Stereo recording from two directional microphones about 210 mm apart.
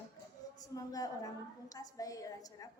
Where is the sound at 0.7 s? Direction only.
15° left (ahead or behind).